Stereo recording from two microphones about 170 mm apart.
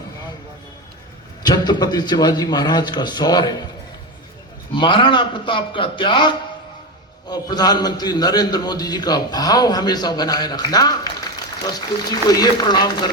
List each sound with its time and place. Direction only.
1.5 s a man's voice: 25° left (ahead or behind)
4.7 s a man's voice: 30° left (ahead or behind)
12.3 s a man's voice: 25° left (ahead or behind)